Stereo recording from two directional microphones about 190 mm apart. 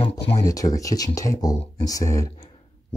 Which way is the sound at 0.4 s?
20° left (ahead or behind).